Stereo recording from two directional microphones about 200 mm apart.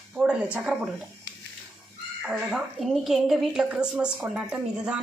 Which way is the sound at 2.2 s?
Centre (ahead or behind).